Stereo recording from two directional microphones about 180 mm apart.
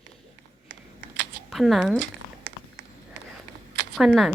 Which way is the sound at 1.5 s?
Centre (ahead or behind).